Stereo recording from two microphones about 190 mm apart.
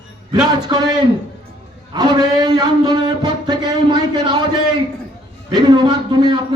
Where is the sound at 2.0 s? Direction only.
20° right (ahead or behind).